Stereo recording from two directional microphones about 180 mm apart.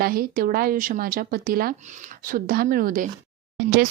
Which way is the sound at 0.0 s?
55° right (ahead or behind).